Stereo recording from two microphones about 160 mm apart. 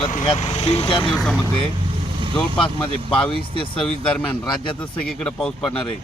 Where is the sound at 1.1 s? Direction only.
5° left (ahead or behind).